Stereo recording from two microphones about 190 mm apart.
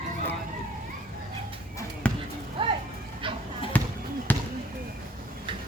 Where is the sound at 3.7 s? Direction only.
10° left (ahead or behind).